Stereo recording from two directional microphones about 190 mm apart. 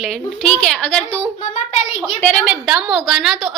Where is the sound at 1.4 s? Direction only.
40° left (ahead or behind).